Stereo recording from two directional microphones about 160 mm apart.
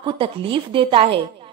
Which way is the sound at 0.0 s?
30° right (ahead or behind).